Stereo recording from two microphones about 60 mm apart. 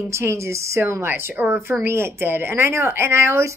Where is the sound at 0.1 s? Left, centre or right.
Right.